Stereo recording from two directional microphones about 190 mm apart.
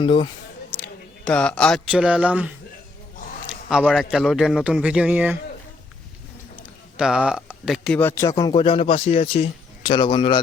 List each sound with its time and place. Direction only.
0.0 s speech: 30° left (ahead or behind)
0.7 s speech: 5° left (ahead or behind)
3.8 s speech: centre (ahead or behind)
6.9 s speech: 5° right (ahead or behind); by 10.4 s 25° left (ahead or behind)